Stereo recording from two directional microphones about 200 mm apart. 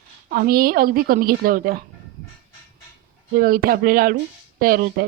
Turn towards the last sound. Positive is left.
turn(degrees=-45)  # may be behind; listen again after turning